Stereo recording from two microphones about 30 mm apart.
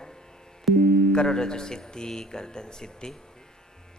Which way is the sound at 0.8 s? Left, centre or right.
Left.